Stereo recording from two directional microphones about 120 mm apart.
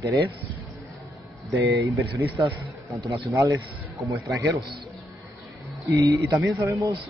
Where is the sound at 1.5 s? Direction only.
25° right (ahead or behind).